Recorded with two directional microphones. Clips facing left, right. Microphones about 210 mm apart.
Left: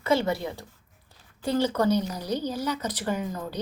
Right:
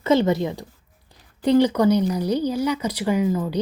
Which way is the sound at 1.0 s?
15° right (ahead or behind).